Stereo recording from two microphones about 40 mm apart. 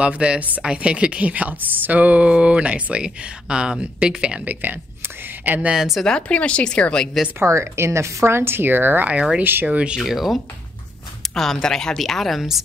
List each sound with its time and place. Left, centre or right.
0.0 s speech: right
1.8 s a sound: right
2.2 s speech: right
4.5 s a woman's voice: right
5.7 s a woman's voice: centre
6.2 s speech: left
7.3 s speech: right
9.1 s speech: right
9.4 s speech: right
9.7 s a sound: right
9.9 s speech: centre
11.3 s speech: centre
12.0 s speech: centre
12.4 s a woman's voice: centre